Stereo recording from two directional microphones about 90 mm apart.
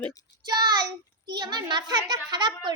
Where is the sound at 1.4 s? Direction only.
55° right (ahead or behind).